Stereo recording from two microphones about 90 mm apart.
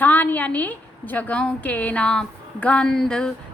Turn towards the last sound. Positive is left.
turn(degrees=5)  # may be behind; listen again after turning